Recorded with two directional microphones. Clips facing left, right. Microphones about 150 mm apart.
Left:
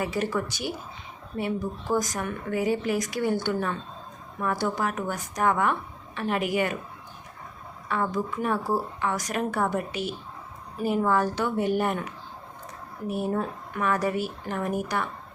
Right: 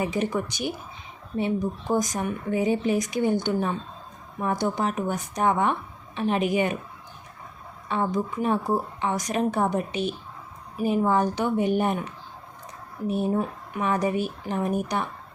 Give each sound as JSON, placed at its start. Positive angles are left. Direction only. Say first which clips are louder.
{"t": 0.0, "sound": "speech", "louder": "right 2 dB", "side_deg": -20}
{"t": 7.9, "sound": "speech", "louder": "right 2 dB", "side_deg": -20}
{"t": 13.1, "sound": "speech", "louder": "right 3 dB", "side_deg": -20}